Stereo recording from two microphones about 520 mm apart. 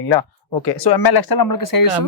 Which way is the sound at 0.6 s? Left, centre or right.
Left.